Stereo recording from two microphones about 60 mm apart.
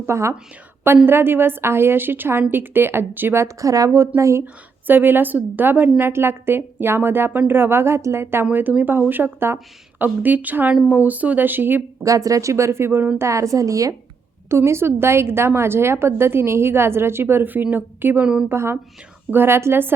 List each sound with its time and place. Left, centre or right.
0.0 s a woman's voice: right
1.0 s a woman's voice: right
3.4 s speech: right
4.9 s a woman's voice: right
6.0 s a woman's voice: right
12.0 s speech: right
13.1 s speech: right
14.5 s a woman's voice: right